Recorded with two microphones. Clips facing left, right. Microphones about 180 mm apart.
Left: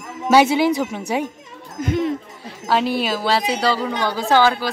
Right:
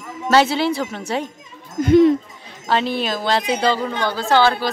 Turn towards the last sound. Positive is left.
turn(degrees=10)  # may be behind; listen again after turning